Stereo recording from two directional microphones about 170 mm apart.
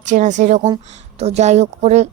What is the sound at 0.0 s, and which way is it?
A woman's voice, 45° right (ahead or behind).